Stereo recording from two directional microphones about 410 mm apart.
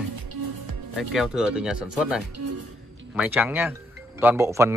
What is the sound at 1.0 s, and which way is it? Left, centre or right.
A man's voice, centre.